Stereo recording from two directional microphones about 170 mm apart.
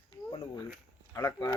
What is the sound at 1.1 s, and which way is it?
Speech, 15° left (ahead or behind).